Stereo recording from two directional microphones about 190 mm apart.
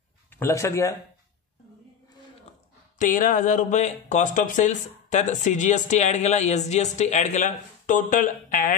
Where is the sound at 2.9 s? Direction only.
45° left (ahead or behind).